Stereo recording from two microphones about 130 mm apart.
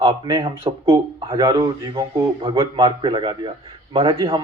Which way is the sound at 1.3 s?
30° right (ahead or behind).